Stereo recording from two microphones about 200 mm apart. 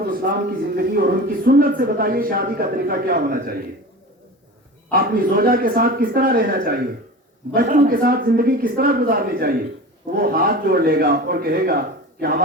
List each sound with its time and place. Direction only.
0.0 s speech: 50° right (ahead or behind)
4.9 s speech: 50° right (ahead or behind)